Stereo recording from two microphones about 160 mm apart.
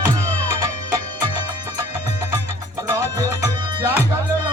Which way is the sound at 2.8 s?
20° right (ahead or behind).